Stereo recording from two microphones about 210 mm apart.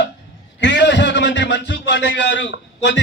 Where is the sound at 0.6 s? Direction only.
55° left (ahead or behind).